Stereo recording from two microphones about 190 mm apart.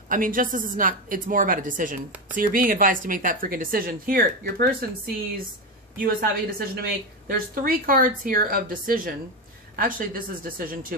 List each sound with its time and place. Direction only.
0.1 s a woman's voice: 45° right (ahead or behind)